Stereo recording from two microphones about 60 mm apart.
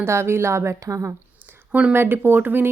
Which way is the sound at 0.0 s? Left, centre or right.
Right.